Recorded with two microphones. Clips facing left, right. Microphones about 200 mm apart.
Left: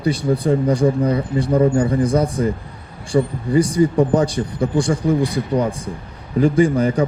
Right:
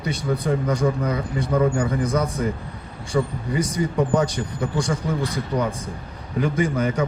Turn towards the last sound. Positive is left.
turn(degrees=30)  # may be behind; listen again after turning